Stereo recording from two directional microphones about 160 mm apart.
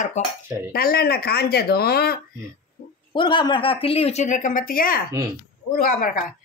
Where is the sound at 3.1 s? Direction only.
30° left (ahead or behind).